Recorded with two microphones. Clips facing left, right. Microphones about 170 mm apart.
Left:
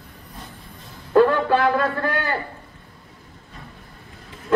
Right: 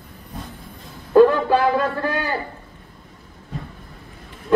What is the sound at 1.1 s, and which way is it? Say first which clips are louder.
A man's voice: right 3 dB; 15° right (ahead or behind).